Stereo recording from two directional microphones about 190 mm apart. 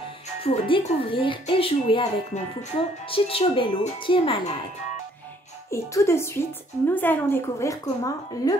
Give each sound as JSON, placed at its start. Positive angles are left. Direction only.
{"t": 0.5, "sound": "speech", "side_deg": 30}
{"t": 5.7, "sound": "a woman's voice", "side_deg": 15}